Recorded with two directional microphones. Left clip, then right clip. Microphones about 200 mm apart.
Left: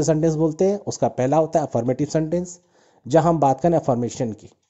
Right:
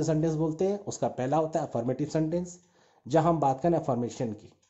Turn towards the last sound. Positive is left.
turn(degrees=35)  # may be behind; listen again after turning